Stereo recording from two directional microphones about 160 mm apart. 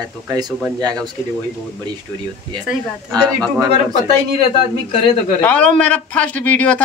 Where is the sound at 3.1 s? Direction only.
25° right (ahead or behind).